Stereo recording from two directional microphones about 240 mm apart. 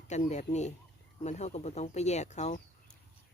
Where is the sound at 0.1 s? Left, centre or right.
Left.